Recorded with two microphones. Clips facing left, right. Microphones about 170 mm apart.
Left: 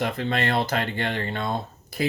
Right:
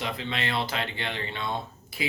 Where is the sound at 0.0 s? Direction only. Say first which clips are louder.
Left 6 dB; 50° left (ahead or behind).